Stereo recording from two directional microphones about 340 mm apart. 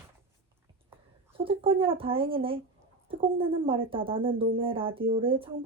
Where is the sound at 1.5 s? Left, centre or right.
Centre.